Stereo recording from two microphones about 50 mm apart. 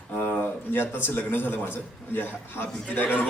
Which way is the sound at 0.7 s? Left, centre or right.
Left.